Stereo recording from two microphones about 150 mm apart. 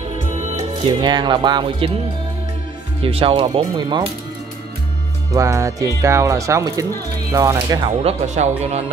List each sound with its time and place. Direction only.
0.6 s speech: 30° right (ahead or behind)
3.0 s speech: 40° right (ahead or behind)
5.3 s speech: 20° right (ahead or behind)
7.7 s speech: 40° right (ahead or behind)